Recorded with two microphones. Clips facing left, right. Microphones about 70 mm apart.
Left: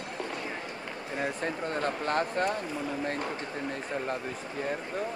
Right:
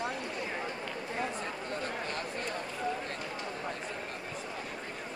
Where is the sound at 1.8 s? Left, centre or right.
Left.